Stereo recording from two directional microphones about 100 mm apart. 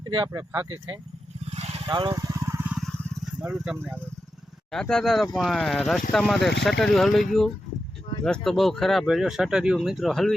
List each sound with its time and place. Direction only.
0.0 s a sound: 50° right (ahead or behind)
0.5 s speech: 25° right (ahead or behind)
1.9 s speech: 50° right (ahead or behind)
2.1 s vehicle: 30° right (ahead or behind)
3.4 s speech: 5° right (ahead or behind)
4.7 s speech: 5° left (ahead or behind)